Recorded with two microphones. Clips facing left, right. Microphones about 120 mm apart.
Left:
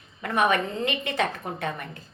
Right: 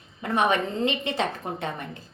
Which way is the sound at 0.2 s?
25° right (ahead or behind).